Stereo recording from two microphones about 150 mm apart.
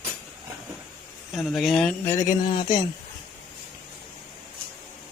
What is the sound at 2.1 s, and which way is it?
Speech, 55° left (ahead or behind).